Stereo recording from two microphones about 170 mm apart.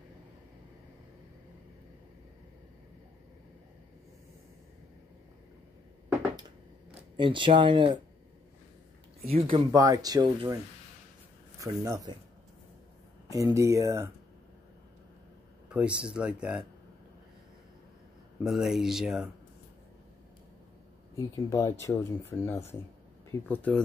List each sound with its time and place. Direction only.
7.2 s speech: 30° right (ahead or behind)
9.2 s speech: 35° right (ahead or behind)
9.7 s speech: 20° right (ahead or behind)
11.6 s speech: 20° right (ahead or behind)
13.3 s speech: 20° right (ahead or behind)
15.7 s speech: 5° right (ahead or behind)
18.4 s speech: centre (ahead or behind)
21.2 s speech: 20° left (ahead or behind)